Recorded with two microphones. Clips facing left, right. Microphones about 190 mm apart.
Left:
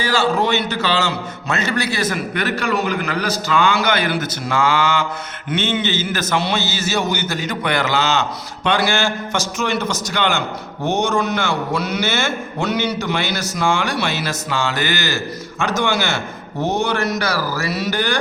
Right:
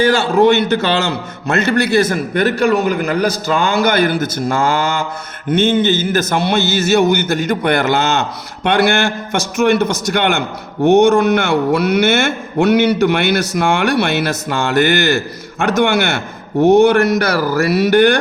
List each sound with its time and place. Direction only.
0.0 s a man's voice: 55° right (ahead or behind)